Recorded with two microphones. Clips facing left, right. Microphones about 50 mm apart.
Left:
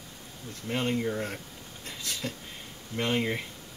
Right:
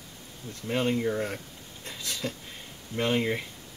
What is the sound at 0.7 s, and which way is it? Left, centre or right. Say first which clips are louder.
Speech: right 2 dB; centre.